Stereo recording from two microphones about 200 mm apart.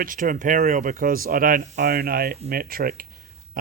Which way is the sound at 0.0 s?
45° right (ahead or behind).